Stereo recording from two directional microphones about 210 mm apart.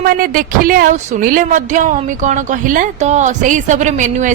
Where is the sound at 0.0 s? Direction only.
45° right (ahead or behind).